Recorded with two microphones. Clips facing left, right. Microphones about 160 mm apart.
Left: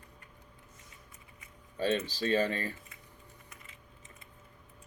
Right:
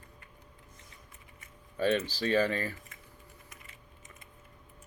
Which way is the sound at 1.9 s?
25° left (ahead or behind).